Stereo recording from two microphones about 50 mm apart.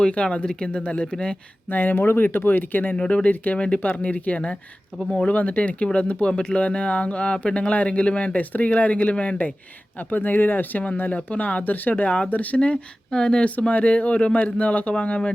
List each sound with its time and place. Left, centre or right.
0.0 s speech: left
1.7 s speech: left
2.9 s speech: centre
3.8 s speech: left
4.0 s speech: left
10.0 s speech: left
13.1 s speech: centre